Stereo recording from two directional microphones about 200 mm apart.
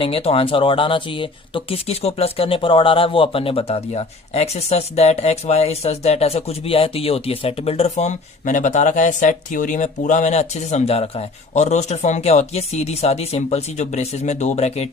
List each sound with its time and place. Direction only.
0.0 s speech: 30° left (ahead or behind)